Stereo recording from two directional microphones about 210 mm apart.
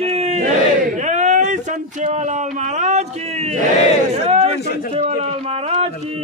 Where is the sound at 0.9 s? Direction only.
35° right (ahead or behind).